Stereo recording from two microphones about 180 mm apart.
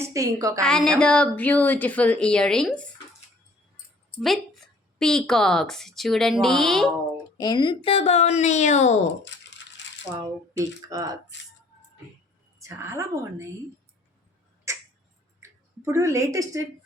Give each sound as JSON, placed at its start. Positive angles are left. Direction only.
{"t": 0.0, "sound": "a woman's voice", "side_deg": -15}
{"t": 0.6, "sound": "speech", "side_deg": 5}
{"t": 4.2, "sound": "a woman's voice", "side_deg": 0}
{"t": 7.3, "sound": "speech", "side_deg": 25}
{"t": 9.8, "sound": "coin", "side_deg": 80}
{"t": 10.6, "sound": "speech", "side_deg": -20}
{"t": 12.5, "sound": "a woman's voice", "side_deg": -15}
{"t": 14.7, "sound": "a sound", "side_deg": -15}